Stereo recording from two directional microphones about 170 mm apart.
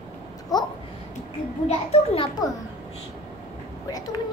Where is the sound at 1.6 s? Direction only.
35° left (ahead or behind).